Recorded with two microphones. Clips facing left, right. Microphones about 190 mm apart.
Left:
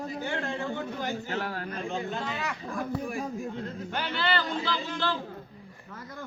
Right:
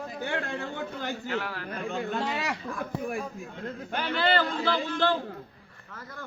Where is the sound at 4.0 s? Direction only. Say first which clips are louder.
Right 4 dB; 50° right (ahead or behind).